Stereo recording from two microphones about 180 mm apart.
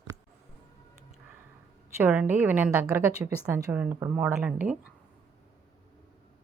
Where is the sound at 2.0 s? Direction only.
10° right (ahead or behind).